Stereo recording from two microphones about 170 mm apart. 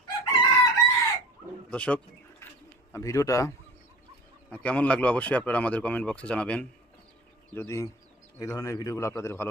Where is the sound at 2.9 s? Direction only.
20° left (ahead or behind).